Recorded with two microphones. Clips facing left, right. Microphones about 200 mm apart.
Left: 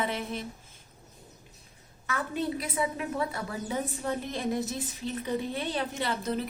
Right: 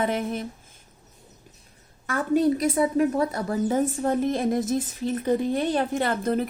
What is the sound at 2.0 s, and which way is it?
A woman's voice, 45° right (ahead or behind).